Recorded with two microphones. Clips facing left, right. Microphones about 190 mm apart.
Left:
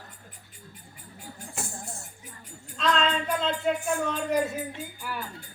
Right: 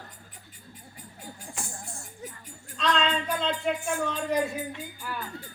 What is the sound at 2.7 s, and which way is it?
Music, centre (ahead or behind).